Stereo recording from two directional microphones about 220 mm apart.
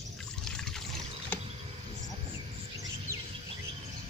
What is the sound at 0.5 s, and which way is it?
Pour, centre (ahead or behind).